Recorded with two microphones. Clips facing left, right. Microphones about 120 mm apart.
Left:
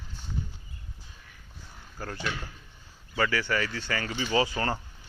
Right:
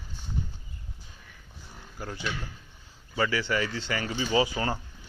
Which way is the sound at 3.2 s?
20° right (ahead or behind).